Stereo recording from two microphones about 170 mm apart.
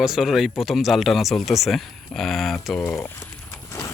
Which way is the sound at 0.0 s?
Centre (ahead or behind).